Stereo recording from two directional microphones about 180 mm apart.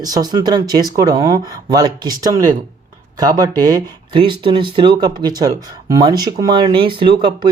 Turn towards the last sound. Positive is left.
turn(degrees=-25)  # may be behind; listen again after turning